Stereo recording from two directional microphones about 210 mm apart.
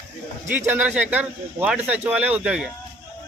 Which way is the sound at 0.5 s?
10° right (ahead or behind).